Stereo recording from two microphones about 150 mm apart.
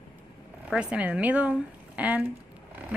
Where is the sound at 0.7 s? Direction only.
5° right (ahead or behind).